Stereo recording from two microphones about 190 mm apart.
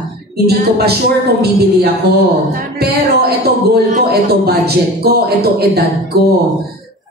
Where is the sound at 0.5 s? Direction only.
55° right (ahead or behind).